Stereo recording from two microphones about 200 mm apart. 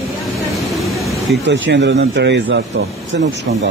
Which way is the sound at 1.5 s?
60° right (ahead or behind).